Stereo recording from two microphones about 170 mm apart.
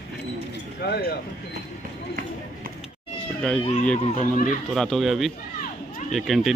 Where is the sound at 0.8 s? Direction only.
70° left (ahead or behind).